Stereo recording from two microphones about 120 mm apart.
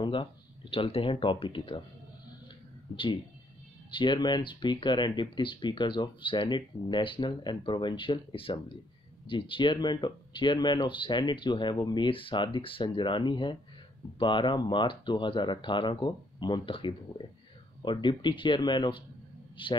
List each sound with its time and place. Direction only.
0.0 s speech: 45° left (ahead or behind)
3.9 s a man's voice: 40° left (ahead or behind)